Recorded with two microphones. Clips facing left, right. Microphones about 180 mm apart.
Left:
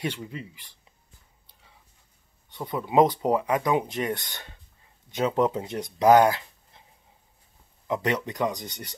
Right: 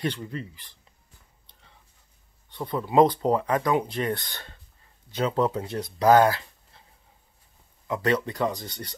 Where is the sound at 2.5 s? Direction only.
10° left (ahead or behind).